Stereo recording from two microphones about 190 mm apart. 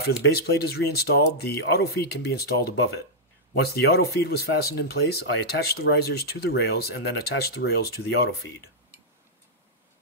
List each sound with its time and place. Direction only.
0.0 s speech: 65° left (ahead or behind)